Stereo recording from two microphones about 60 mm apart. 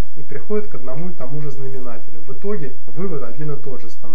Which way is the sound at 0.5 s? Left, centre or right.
Centre.